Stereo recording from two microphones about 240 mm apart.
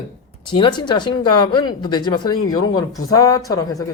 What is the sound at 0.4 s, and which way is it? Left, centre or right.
Speech, centre.